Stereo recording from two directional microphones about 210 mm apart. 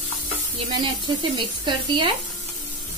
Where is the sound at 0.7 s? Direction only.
20° right (ahead or behind).